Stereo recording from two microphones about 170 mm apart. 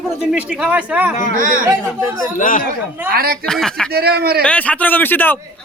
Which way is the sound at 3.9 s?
70° right (ahead or behind).